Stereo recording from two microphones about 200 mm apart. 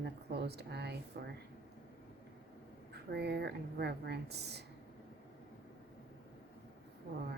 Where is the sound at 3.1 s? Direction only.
55° right (ahead or behind).